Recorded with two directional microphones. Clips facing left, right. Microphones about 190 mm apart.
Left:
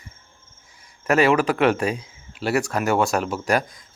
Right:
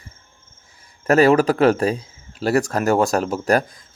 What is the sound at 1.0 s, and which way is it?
Speech, 35° right (ahead or behind).